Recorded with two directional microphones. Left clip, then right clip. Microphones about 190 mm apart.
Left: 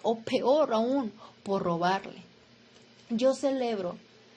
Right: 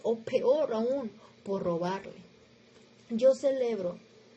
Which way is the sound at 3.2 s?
15° left (ahead or behind).